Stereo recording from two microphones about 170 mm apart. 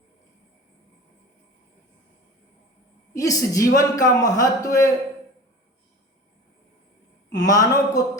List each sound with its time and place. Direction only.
3.1 s a man's voice: 20° left (ahead or behind)
7.3 s a man's voice: 20° left (ahead or behind)